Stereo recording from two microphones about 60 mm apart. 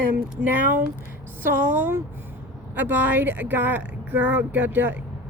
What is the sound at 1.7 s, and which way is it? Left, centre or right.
Speech, right.